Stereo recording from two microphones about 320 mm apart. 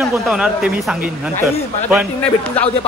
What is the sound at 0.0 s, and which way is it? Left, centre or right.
Speech, centre.